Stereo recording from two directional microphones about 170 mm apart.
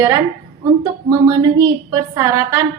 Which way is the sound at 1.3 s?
20° right (ahead or behind).